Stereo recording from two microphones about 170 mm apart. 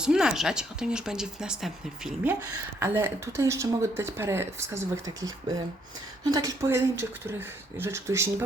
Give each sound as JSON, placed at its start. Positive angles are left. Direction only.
{"t": 0.0, "sound": "speech", "side_deg": -5}
{"t": 2.8, "sound": "speech", "side_deg": -15}